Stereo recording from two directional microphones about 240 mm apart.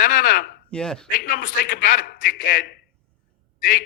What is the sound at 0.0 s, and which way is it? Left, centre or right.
Speech, left.